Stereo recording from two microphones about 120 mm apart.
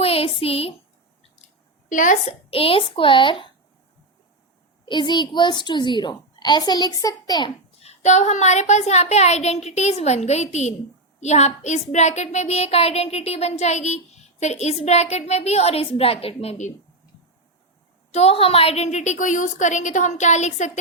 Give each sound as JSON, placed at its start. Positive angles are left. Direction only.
{"t": 0.0, "sound": "a woman's voice", "side_deg": 55}
{"t": 1.9, "sound": "a woman's voice", "side_deg": 90}
{"t": 2.5, "sound": "a child's voice", "side_deg": 50}
{"t": 4.9, "sound": "a woman's voice", "side_deg": 40}
{"t": 7.8, "sound": "a woman's voice", "side_deg": 70}
{"t": 11.2, "sound": "child singing", "side_deg": 70}
{"t": 18.1, "sound": "a woman's voice", "side_deg": 60}